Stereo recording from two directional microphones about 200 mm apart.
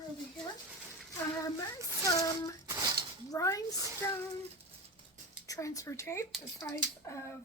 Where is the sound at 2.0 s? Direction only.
15° left (ahead or behind).